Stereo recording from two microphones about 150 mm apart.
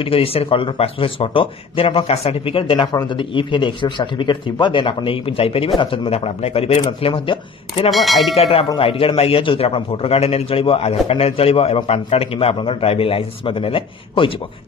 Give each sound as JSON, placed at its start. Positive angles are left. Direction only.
{"t": 0.0, "sound": "a man's voice", "side_deg": 40}
{"t": 7.9, "sound": "speech", "side_deg": 0}
{"t": 8.4, "sound": "a man's voice", "side_deg": 40}